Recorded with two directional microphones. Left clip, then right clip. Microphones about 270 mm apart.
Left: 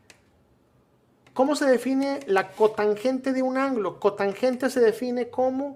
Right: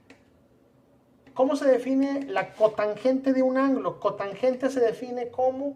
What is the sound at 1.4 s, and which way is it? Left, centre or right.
Speech, left.